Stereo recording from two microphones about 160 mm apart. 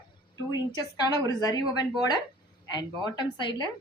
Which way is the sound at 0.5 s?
25° left (ahead or behind).